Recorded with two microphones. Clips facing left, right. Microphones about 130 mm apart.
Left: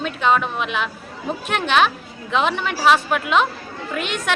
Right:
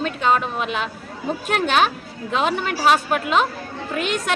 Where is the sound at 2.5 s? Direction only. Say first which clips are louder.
Even; 40° right (ahead or behind).